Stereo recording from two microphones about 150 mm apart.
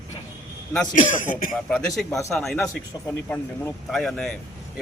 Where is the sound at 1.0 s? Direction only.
65° left (ahead or behind).